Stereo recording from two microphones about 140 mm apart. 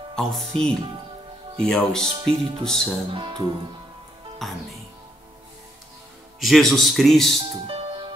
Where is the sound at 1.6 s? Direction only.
5° left (ahead or behind).